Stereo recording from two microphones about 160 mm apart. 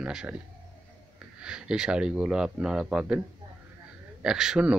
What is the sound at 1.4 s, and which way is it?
Speech, 5° right (ahead or behind).